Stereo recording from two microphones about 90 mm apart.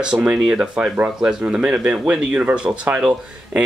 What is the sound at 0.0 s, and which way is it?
Speech, 10° right (ahead or behind).